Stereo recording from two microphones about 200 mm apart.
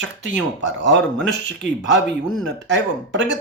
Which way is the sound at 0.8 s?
60° right (ahead or behind).